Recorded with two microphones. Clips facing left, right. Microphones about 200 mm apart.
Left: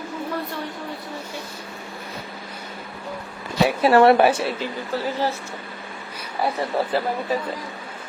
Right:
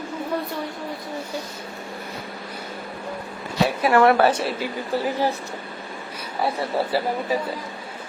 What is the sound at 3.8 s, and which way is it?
Speech, 30° left (ahead or behind).